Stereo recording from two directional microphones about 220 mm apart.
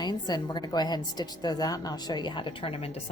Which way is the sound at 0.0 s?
20° left (ahead or behind).